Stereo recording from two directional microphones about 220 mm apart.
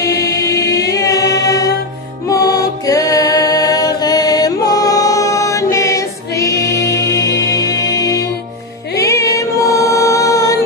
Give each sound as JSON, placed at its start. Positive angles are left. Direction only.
{"t": 0.0, "sound": "music", "side_deg": 15}